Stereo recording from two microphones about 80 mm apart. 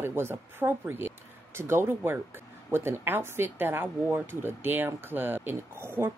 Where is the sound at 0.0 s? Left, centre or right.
Right.